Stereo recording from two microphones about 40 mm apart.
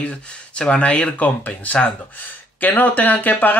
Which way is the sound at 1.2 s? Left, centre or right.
Left.